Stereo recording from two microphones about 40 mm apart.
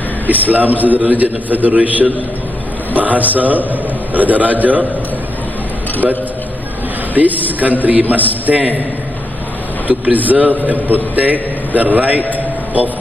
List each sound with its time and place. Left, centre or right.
0.3 s a man's voice: right
7.2 s a man's voice: right
9.8 s a man's voice: right